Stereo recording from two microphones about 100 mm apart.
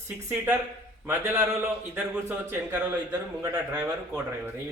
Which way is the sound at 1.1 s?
25° right (ahead or behind).